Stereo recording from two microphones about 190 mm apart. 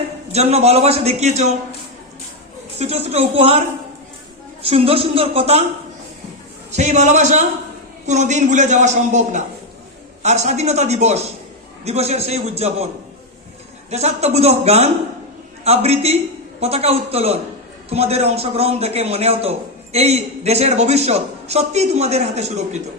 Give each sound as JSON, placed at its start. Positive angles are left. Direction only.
{"t": 0.3, "sound": "a man's voice", "side_deg": -35}
{"t": 2.7, "sound": "a man's voice", "side_deg": -35}
{"t": 4.6, "sound": "a man's voice", "side_deg": -30}
{"t": 6.7, "sound": "a man's voice", "side_deg": -40}
{"t": 13.9, "sound": "a man's voice", "side_deg": -35}